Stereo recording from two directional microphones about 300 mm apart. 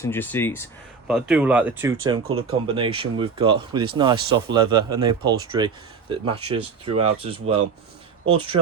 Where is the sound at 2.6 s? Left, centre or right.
Centre.